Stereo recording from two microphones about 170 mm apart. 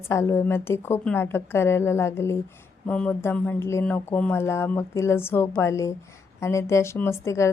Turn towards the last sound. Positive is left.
turn(degrees=15)  # may be behind; listen again after turning